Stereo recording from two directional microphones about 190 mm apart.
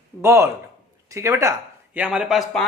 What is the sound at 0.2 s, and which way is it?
Speech, 15° right (ahead or behind).